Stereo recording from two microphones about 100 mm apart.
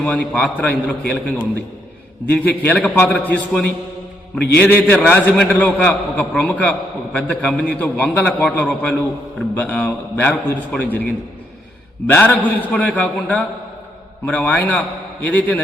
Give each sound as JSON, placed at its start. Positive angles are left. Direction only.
{"t": 0.0, "sound": "a man's voice", "side_deg": 15}
{"t": 12.1, "sound": "a man's voice", "side_deg": 15}